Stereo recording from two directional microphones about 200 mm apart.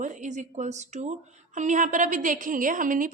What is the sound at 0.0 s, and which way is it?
A woman's voice, 40° right (ahead or behind).